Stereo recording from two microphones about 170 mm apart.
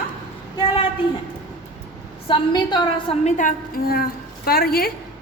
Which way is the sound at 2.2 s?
30° left (ahead or behind).